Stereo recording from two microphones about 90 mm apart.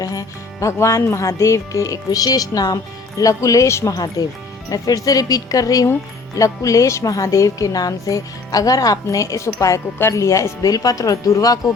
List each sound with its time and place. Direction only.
0.0 s speech: 40° left (ahead or behind)
3.9 s speech: 45° left (ahead or behind)